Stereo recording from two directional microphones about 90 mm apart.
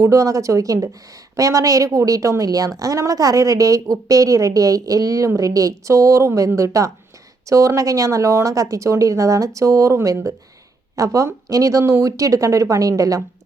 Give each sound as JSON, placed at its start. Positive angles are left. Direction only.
{"t": 0.0, "sound": "a woman's voice", "side_deg": -35}